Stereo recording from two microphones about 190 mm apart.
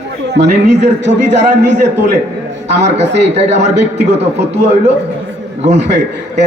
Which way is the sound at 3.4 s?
35° right (ahead or behind).